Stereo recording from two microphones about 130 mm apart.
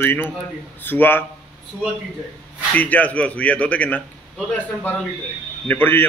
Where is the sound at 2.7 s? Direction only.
10° left (ahead or behind).